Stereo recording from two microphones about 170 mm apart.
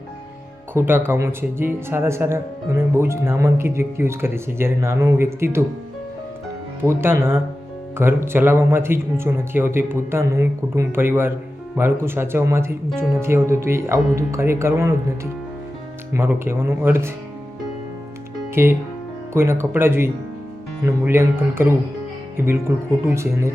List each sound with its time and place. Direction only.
0.7 s speech: 15° right (ahead or behind)
6.8 s speech: 15° right (ahead or behind)
18.5 s speech: 15° right (ahead or behind)